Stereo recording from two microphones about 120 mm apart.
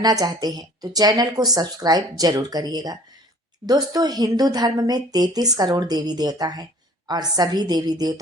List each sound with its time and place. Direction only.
0.0 s speech: 30° right (ahead or behind)